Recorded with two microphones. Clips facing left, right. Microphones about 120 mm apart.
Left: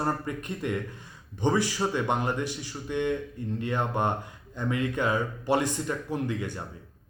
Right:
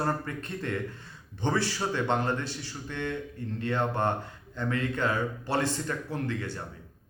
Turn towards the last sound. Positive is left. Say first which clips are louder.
# left 2 dB
turn(degrees=15)  # may be behind; listen again after turning